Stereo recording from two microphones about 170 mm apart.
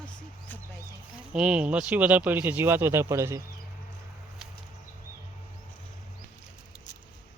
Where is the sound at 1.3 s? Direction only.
5° right (ahead or behind).